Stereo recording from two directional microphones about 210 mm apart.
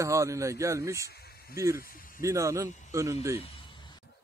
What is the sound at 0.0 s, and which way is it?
A man's voice, 15° right (ahead or behind).